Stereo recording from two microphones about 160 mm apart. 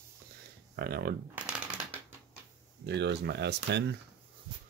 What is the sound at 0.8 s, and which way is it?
Speech, 75° right (ahead or behind).